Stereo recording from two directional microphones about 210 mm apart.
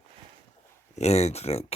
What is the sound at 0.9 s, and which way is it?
Speech, 30° left (ahead or behind).